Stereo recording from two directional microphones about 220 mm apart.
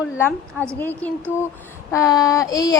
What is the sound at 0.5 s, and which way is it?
Speech, 10° right (ahead or behind).